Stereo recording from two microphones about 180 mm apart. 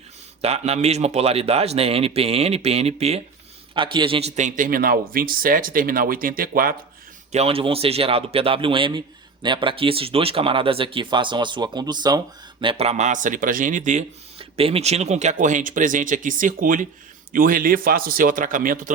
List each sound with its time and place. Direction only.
0.4 s speech: 35° right (ahead or behind); by 6.7 s 55° right (ahead or behind)
7.3 s a man's voice: 30° right (ahead or behind)
12.6 s speech: 35° right (ahead or behind)